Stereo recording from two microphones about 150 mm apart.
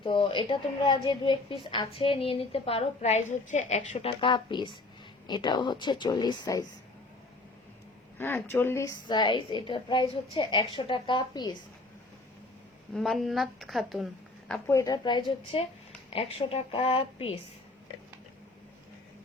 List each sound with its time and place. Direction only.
0.0 s a woman's voice: 35° left (ahead or behind); by 4.1 s 50° left (ahead or behind)
4.2 s a woman's voice: 30° left (ahead or behind)
8.2 s a woman's voice: 15° left (ahead or behind); by 11.5 s 30° left (ahead or behind)
12.9 s a woman's voice: centre (ahead or behind)
14.7 s a woman's voice: 25° left (ahead or behind); by 17.4 s 40° left (ahead or behind)